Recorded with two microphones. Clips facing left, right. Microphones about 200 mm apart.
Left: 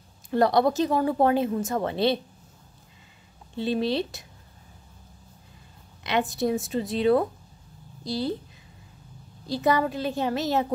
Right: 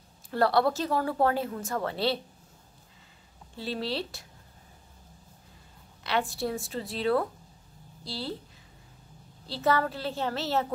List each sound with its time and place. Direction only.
0.3 s speech: 20° left (ahead or behind)
3.5 s speech: 20° left (ahead or behind)
6.0 s a child's voice: 20° left (ahead or behind)
9.5 s a child's voice: 15° left (ahead or behind)